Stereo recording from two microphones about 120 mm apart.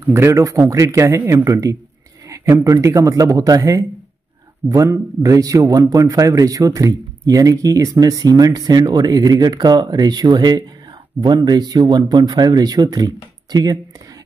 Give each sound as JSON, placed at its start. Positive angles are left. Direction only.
{"t": 0.0, "sound": "a man's voice", "side_deg": -20}